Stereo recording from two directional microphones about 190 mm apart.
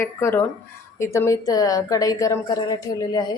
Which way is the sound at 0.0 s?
15° left (ahead or behind).